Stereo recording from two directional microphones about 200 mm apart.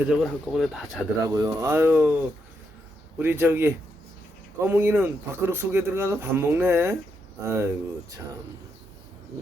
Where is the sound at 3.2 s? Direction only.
10° right (ahead or behind).